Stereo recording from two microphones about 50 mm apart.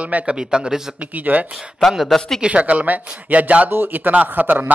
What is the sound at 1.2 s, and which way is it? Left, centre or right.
Speech, right.